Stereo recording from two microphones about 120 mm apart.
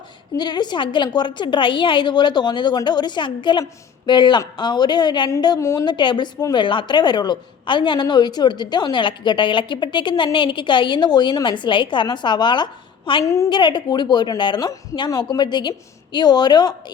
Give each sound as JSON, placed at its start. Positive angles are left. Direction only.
{"t": 0.3, "sound": "a woman's voice", "side_deg": 35}
{"t": 5.5, "sound": "a woman's voice", "side_deg": 25}
{"t": 5.8, "sound": "a woman's voice", "side_deg": 40}
{"t": 13.2, "sound": "a woman's voice", "side_deg": 25}
{"t": 13.5, "sound": "a woman's voice", "side_deg": 40}